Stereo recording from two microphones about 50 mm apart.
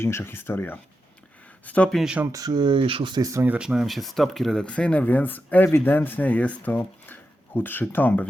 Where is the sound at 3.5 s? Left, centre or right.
Centre.